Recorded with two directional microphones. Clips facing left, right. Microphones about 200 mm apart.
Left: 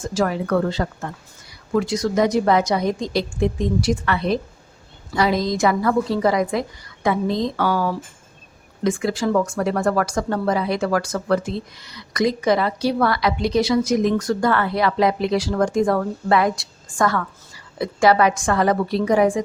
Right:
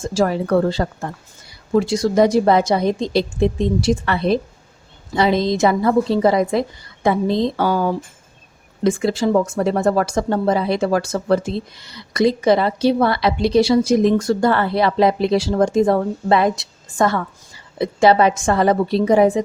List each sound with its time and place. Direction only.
0.0 s a woman's voice: 30° right (ahead or behind)